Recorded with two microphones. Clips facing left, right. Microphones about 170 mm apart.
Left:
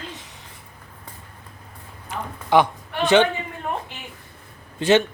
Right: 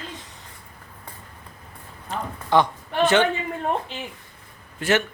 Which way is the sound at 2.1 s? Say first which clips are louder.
Left 2 dB; 15° left (ahead or behind).